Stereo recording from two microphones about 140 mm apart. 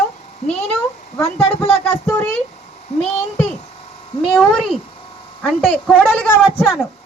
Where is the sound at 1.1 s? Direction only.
20° left (ahead or behind).